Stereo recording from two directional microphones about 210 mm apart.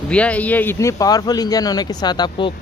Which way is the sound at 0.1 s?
5° left (ahead or behind).